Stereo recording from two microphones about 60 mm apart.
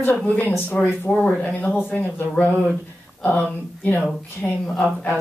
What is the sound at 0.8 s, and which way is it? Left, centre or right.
Speech, centre.